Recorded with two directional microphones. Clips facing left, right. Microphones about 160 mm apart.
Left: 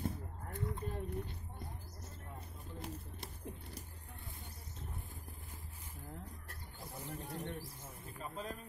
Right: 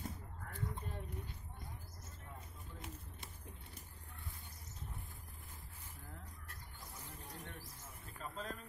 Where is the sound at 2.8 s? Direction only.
35° left (ahead or behind).